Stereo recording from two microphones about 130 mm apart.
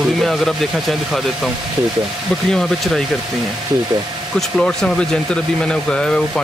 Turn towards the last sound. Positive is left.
turn(degrees=5)  # may be behind; listen again after turning